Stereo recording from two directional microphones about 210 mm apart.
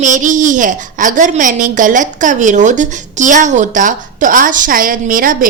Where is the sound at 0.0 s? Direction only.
35° right (ahead or behind).